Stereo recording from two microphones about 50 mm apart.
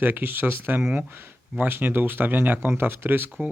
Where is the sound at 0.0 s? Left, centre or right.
Right.